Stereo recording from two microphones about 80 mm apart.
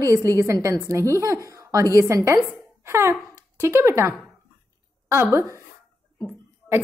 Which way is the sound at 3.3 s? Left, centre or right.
Right.